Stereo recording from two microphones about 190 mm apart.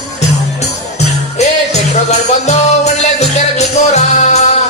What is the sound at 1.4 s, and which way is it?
Music, 35° left (ahead or behind).